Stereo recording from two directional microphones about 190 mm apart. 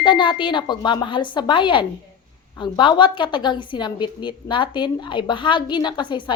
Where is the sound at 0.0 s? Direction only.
25° left (ahead or behind).